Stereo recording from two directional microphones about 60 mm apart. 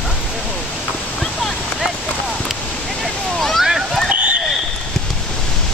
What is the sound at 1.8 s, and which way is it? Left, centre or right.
Clip-clop, centre.